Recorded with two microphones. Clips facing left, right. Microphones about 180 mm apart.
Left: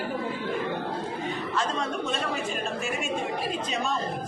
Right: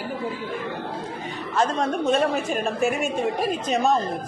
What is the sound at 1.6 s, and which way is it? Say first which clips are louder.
Speech: right 8 dB; 50° right (ahead or behind).